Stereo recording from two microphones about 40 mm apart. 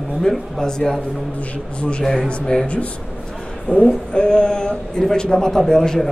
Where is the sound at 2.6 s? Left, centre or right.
Left.